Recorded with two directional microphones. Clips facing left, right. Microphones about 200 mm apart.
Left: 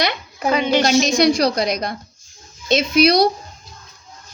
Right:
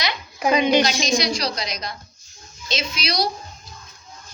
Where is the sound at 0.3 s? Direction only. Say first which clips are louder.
Even; 15° right (ahead or behind).